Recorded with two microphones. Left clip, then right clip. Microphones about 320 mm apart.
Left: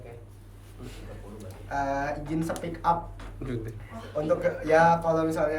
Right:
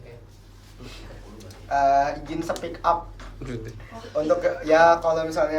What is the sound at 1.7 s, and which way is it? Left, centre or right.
A man's voice, centre.